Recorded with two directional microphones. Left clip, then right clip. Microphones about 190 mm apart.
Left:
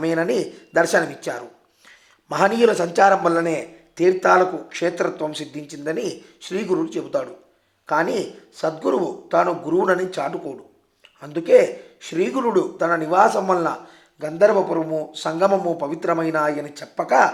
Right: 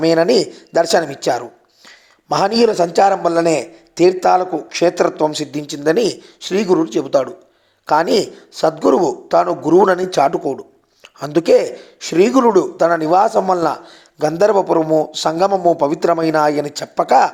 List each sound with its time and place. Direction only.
0.0 s a man's voice: 25° right (ahead or behind)